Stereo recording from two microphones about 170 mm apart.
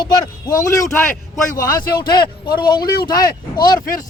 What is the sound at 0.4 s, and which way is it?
A man's voice, 20° left (ahead or behind).